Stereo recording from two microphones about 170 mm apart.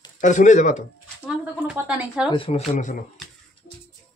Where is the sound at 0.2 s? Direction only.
45° left (ahead or behind).